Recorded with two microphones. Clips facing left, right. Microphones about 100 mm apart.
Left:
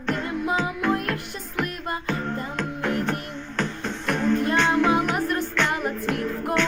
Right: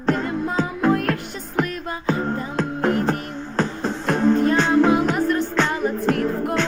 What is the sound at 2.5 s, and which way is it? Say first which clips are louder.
Music: right 6 dB; 35° right (ahead or behind).